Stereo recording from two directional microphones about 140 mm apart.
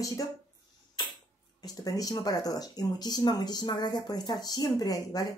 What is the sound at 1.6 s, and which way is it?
Speech, 25° left (ahead or behind).